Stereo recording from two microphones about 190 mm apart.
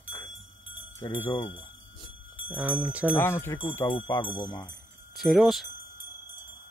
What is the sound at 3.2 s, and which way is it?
Speech, 15° left (ahead or behind).